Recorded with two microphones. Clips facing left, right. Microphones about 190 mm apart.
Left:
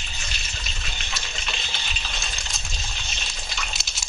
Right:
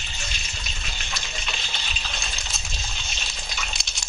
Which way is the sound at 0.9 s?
Centre (ahead or behind).